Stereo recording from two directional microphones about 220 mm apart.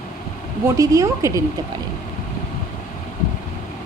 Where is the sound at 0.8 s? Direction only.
15° right (ahead or behind).